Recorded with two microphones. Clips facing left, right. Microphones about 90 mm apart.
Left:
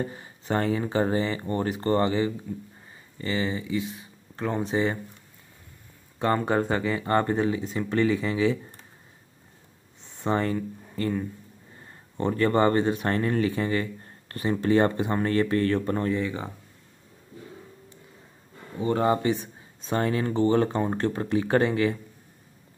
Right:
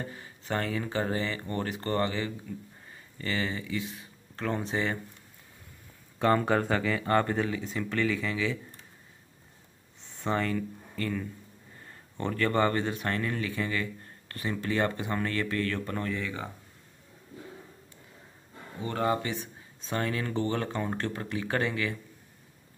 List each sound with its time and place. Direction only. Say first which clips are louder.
0.0 s speech: left 7 dB; 25° left (ahead or behind)
6.2 s speech: left 1 dB; 15° left (ahead or behind)
10.2 s speech: left 4 dB; 25° left (ahead or behind)
18.8 s speech: left 6 dB; 25° left (ahead or behind)